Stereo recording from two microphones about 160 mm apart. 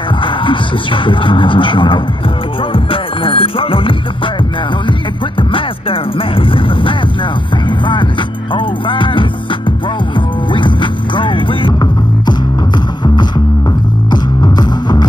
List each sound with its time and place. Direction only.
0.2 s speech: 30° left (ahead or behind)
2.7 s music: 35° left (ahead or behind)
5.5 s music: 35° left (ahead or behind)